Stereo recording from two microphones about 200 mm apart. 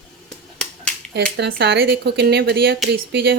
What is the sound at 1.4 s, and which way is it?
Speech, 55° right (ahead or behind).